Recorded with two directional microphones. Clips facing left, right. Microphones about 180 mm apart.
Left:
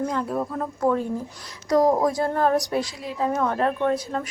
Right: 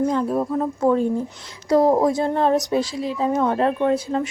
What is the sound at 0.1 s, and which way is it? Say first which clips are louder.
A woman's voice: right 5 dB; 25° right (ahead or behind).